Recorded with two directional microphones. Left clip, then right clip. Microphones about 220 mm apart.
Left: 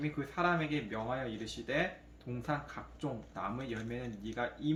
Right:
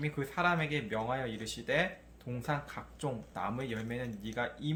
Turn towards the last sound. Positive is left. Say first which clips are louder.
# right 1 dB
turn(degrees=-50)  # may be behind; listen again after turning